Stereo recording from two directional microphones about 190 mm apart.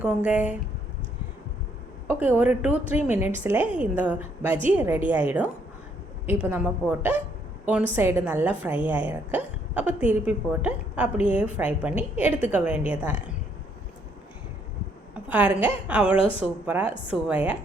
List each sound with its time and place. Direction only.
0.0 s speech: 5° right (ahead or behind)
2.0 s a woman's voice: 10° right (ahead or behind)
15.1 s a woman's voice: 5° right (ahead or behind)
16.1 s a woman's voice: 30° left (ahead or behind)
16.4 s speech: 10° right (ahead or behind)